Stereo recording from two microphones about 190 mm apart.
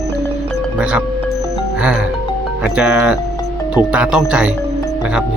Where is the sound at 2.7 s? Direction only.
5° right (ahead or behind).